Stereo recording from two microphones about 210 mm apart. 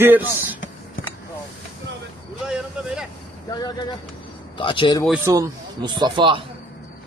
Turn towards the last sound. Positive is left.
turn(degrees=-20)  # may be behind; listen again after turning